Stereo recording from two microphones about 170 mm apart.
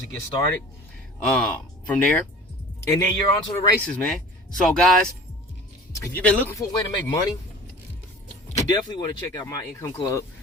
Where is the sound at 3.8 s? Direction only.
5° left (ahead or behind).